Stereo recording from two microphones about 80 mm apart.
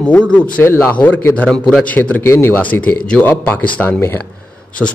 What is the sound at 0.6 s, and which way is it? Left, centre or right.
Speech, left.